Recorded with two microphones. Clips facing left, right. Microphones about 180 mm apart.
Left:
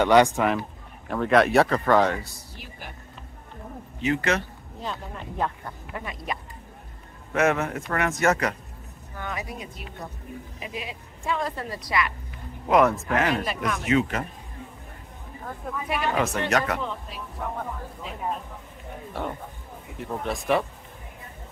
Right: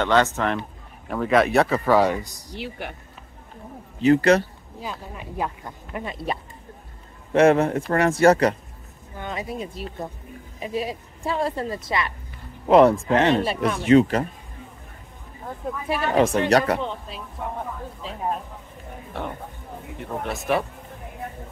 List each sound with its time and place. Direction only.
0.0 s speech: 15° left (ahead or behind)
1.0 s speech: centre (ahead or behind)
2.5 s speech: 75° right (ahead or behind)
4.0 s speech: 35° right (ahead or behind)
4.7 s speech: 5° right (ahead or behind)
5.9 s speech: 30° right (ahead or behind)
7.3 s speech: 30° right (ahead or behind)
15.9 s speech: 30° right (ahead or behind)
20.0 s speech: centre (ahead or behind)